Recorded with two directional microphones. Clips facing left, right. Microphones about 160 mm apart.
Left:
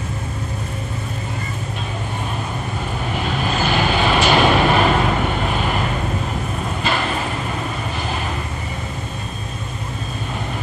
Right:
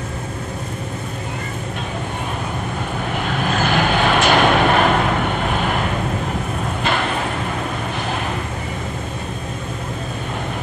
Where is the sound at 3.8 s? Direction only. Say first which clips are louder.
Even; 15° left (ahead or behind).